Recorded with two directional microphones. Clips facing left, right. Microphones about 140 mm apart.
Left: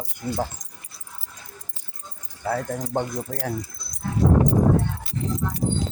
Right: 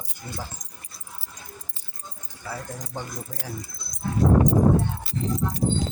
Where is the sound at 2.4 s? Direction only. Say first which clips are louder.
Left 9 dB; 60° left (ahead or behind).